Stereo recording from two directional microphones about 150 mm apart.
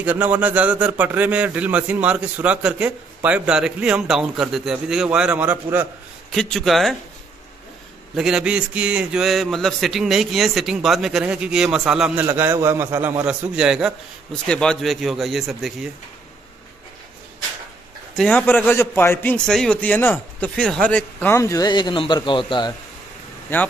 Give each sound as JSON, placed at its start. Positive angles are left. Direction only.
{"t": 0.0, "sound": "a man's voice", "side_deg": -10}
{"t": 6.3, "sound": "a man's voice", "side_deg": 0}
{"t": 8.2, "sound": "a man's voice", "side_deg": -5}
{"t": 18.1, "sound": "a man's voice", "side_deg": 10}